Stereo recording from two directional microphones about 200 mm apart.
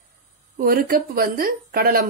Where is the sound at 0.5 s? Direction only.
45° right (ahead or behind).